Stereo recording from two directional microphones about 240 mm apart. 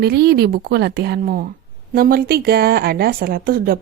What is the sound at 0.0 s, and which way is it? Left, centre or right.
A woman's voice, right.